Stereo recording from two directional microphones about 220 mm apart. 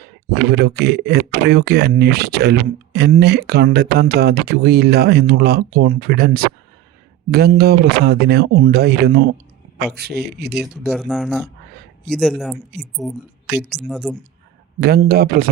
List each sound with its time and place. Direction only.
0.5 s speech: 45° right (ahead or behind)
10.6 s speech: centre (ahead or behind)
14.8 s speech: 45° right (ahead or behind)